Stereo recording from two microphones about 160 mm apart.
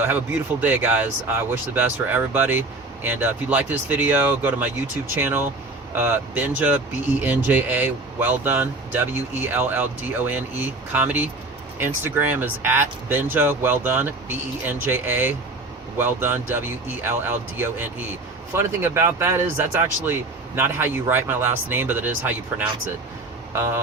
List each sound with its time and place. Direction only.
0.6 s speech: 10° right (ahead or behind)